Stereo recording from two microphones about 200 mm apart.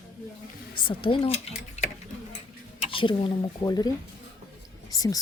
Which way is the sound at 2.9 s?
25° left (ahead or behind).